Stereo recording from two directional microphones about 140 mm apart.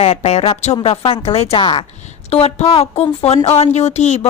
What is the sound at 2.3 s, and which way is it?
A woman's voice, 45° left (ahead or behind).